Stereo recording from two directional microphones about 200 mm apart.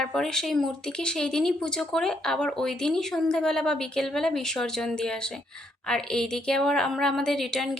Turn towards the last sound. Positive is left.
turn(degrees=0)  # may be behind; listen again after turning